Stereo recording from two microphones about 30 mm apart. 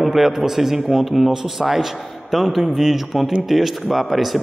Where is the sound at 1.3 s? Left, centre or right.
Centre.